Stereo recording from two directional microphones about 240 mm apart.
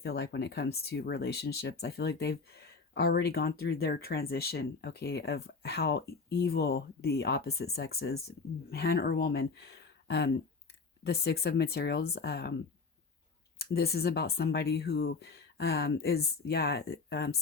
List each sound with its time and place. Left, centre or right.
0.0 s speech: left
13.6 s speech: left